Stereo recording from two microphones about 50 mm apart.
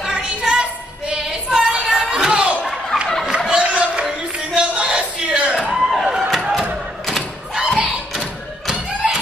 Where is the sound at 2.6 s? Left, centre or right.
Centre.